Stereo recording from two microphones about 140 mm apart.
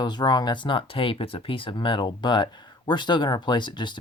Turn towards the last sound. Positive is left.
turn(degrees=35)  # may be behind; listen again after turning